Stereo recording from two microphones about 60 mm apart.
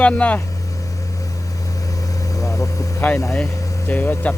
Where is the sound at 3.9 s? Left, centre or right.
Left.